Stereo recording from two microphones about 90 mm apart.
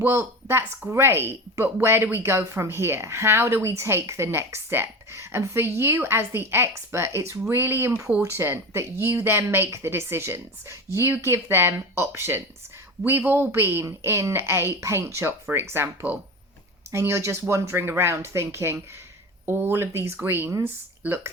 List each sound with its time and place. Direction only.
0.0 s a woman's voice: 30° right (ahead or behind)